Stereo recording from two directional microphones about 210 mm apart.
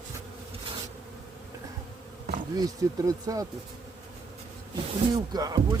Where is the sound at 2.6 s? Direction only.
15° right (ahead or behind).